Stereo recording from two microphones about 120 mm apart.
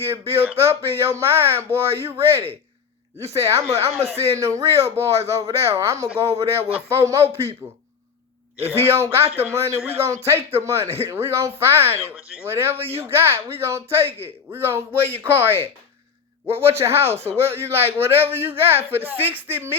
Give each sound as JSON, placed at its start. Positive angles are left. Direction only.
{"t": 0.0, "sound": "speech", "side_deg": -20}
{"t": 8.7, "sound": "speech", "side_deg": -20}
{"t": 16.6, "sound": "a woman's voice", "side_deg": -20}